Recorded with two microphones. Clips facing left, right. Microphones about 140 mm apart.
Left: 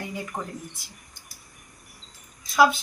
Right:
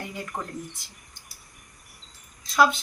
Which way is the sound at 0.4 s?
10° left (ahead or behind).